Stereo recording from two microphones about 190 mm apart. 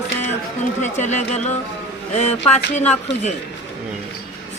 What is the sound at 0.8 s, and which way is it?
Speech, 40° left (ahead or behind).